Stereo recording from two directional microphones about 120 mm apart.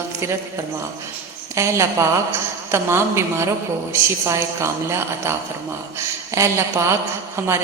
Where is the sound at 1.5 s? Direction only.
25° right (ahead or behind).